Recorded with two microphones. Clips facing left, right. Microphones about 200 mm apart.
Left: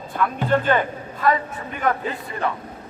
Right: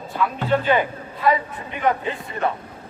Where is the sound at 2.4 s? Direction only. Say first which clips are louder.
Right 2 dB; 30° right (ahead or behind).